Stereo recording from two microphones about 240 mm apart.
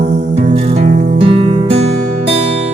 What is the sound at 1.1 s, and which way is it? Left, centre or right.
Music, right.